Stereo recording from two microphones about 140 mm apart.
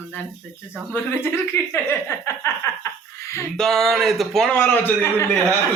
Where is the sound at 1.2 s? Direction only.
15° left (ahead or behind).